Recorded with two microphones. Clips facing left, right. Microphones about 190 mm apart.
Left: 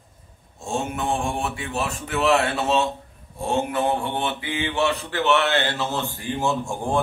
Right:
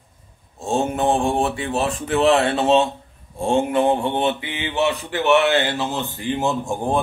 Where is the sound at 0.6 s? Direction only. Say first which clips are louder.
Right 6 dB; 35° right (ahead or behind).